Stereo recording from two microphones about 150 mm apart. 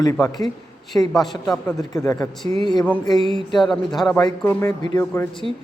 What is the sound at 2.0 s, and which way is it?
Speech, 20° left (ahead or behind).